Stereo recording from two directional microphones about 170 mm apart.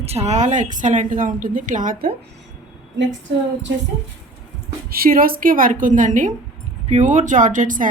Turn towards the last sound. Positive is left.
turn(degrees=-50)  # may be behind; listen again after turning